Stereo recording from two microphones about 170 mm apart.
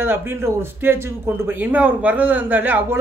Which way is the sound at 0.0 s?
15° right (ahead or behind).